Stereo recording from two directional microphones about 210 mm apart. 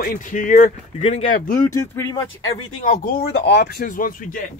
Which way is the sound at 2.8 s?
40° left (ahead or behind).